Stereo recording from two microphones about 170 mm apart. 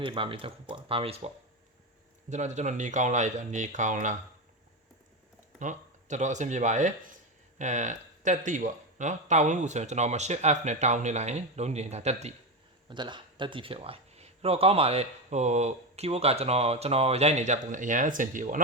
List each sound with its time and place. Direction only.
0.0 s speech: 30° right (ahead or behind)
2.3 s speech: 45° right (ahead or behind)
5.5 s speech: 45° right (ahead or behind)
12.9 s speech: 25° right (ahead or behind); by 18.6 s 50° right (ahead or behind)